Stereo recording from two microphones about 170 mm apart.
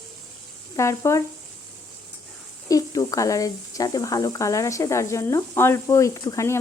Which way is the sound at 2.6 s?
20° left (ahead or behind).